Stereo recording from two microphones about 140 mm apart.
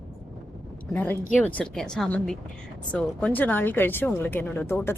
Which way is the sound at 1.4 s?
10° left (ahead or behind).